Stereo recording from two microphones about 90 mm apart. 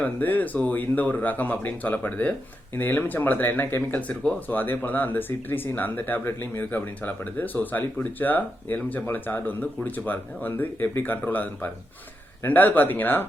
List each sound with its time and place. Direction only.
0.0 s speech: 20° left (ahead or behind)